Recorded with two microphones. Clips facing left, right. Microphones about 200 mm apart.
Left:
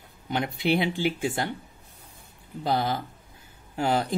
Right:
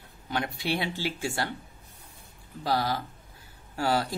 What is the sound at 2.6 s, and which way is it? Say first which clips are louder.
Speech: left 2 dB; 20° left (ahead or behind).